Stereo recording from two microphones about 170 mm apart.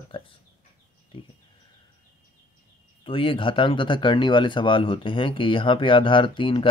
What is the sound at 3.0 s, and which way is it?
Speech, 30° left (ahead or behind).